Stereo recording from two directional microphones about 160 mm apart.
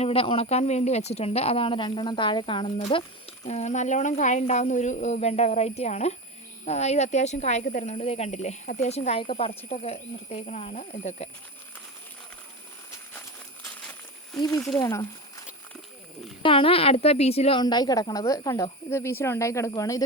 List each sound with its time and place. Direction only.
0.0 s a woman's voice: 35° left (ahead or behind)
14.4 s speech: 20° left (ahead or behind)
16.4 s speech: 35° left (ahead or behind)
17.6 s speech: 25° left (ahead or behind)